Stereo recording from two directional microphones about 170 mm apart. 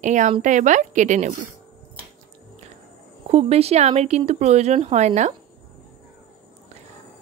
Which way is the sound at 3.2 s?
35° right (ahead or behind).